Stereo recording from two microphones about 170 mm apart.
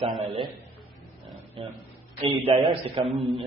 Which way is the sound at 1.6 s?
30° right (ahead or behind).